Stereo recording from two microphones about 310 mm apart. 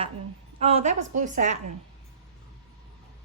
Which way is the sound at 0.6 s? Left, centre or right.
Centre.